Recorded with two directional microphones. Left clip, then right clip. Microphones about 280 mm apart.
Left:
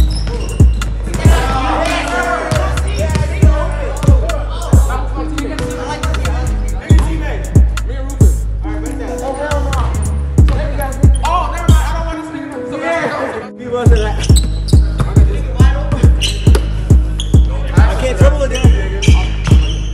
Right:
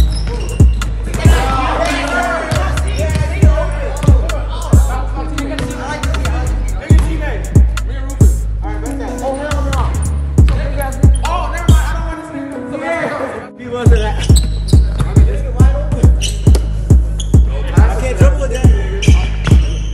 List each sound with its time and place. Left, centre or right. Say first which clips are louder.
0.6 s music: even; centre
10.8 s basketball bounce: right 1 dB; centre
11.6 s music: left 1 dB; centre
12.7 s chatter: left 2 dB; centre
13.7 s basketball bounce: left 1 dB; centre
16.8 s music: left 1 dB; centre